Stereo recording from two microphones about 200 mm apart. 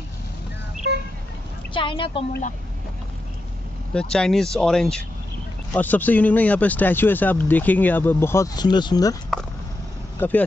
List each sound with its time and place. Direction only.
1.7 s a woman's voice: 25° left (ahead or behind)
3.9 s speech: 5° left (ahead or behind); by 9.1 s 20° left (ahead or behind)
10.1 s speech: 10° left (ahead or behind)